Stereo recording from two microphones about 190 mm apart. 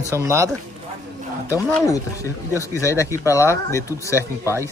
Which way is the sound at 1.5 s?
15° left (ahead or behind).